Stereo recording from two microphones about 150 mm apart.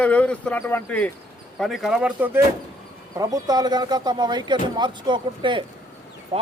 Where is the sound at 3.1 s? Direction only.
25° right (ahead or behind).